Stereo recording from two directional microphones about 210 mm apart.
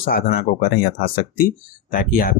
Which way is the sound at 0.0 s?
45° left (ahead or behind).